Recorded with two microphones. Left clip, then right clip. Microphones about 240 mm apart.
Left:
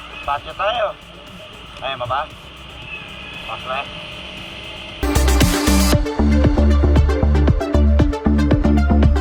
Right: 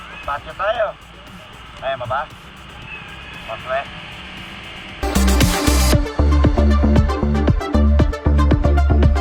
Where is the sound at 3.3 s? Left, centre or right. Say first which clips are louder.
Right 2 dB; centre.